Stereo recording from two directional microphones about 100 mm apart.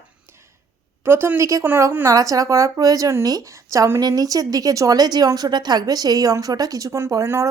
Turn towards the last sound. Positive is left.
turn(degrees=-25)  # may be behind; listen again after turning